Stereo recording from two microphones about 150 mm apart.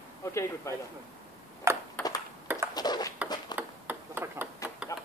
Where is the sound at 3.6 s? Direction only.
10° right (ahead or behind).